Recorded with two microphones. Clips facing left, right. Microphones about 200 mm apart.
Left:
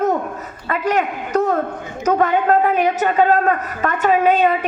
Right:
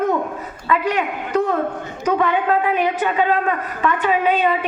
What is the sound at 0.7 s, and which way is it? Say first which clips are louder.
A woman's voice: left 1 dB; 45° left (ahead or behind).